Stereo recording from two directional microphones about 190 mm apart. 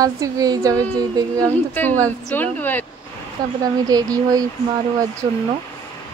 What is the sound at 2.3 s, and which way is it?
Speech, 10° left (ahead or behind).